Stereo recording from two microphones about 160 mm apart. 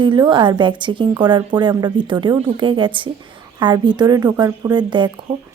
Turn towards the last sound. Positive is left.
turn(degrees=-30)  # may be behind; listen again after turning